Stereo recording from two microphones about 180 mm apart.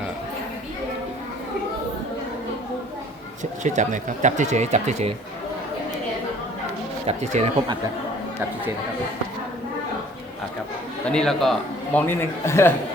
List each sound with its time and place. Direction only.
3.6 s speech: 45° right (ahead or behind)
7.0 s speech: 35° right (ahead or behind)
11.1 s a man's voice: 5° left (ahead or behind)